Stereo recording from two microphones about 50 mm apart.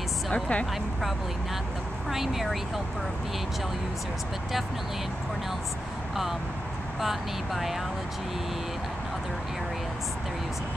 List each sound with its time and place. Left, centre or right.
0.3 s speech: left
2.0 s speech: centre
7.0 s speech: centre